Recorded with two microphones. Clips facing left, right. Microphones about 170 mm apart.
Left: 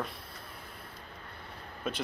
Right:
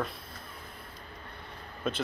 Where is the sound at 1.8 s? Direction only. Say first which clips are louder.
Right 3 dB; 10° left (ahead or behind).